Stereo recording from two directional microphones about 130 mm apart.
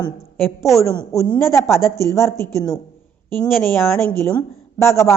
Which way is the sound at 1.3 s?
20° left (ahead or behind).